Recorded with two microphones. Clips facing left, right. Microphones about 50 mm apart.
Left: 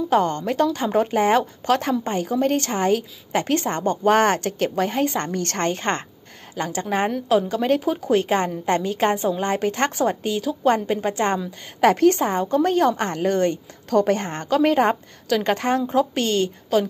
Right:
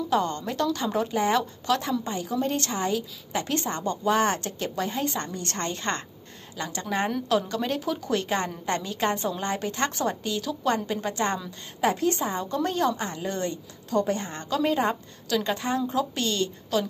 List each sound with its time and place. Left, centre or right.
0.1 s a woman's voice: left
5.3 s a woman's voice: left
5.7 s a woman's voice: left
7.1 s speech: centre
7.6 s a woman's voice: left
11.8 s a woman's voice: left
14.3 s a woman's voice: left